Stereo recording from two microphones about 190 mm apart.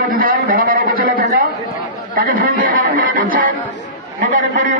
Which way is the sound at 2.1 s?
50° right (ahead or behind).